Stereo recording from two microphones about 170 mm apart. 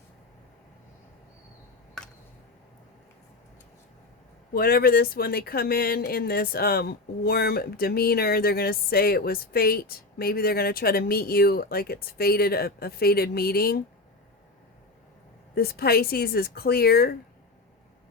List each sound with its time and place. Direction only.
4.5 s speech: 60° left (ahead or behind)
15.5 s speech: 65° left (ahead or behind)